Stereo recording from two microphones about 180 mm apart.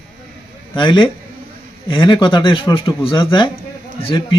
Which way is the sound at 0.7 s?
25° left (ahead or behind).